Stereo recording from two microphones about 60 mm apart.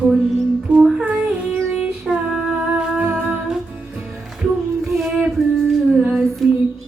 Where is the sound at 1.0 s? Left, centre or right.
Right.